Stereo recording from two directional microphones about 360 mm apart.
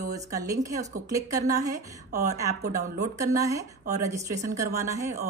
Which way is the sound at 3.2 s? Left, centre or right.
Centre.